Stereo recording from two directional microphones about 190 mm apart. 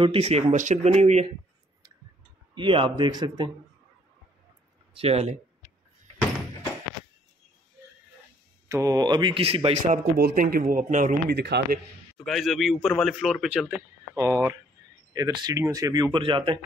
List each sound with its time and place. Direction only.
0.0 s speech: 30° right (ahead or behind)
2.5 s speech: 25° right (ahead or behind)
4.9 s speech: 30° right (ahead or behind)
8.6 s speech: 15° right (ahead or behind)
10.1 s speech: 50° right (ahead or behind)
12.3 s a man's voice: centre (ahead or behind); by 16.5 s 25° right (ahead or behind)